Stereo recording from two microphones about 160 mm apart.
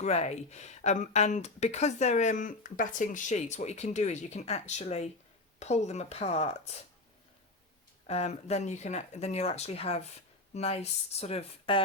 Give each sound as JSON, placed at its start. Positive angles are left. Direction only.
{"t": 0.0, "sound": "speech", "side_deg": 45}
{"t": 8.0, "sound": "speech", "side_deg": 40}